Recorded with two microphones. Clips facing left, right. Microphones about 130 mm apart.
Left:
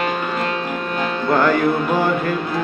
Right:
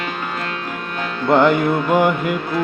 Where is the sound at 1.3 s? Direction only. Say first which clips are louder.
Right 2 dB; 20° right (ahead or behind).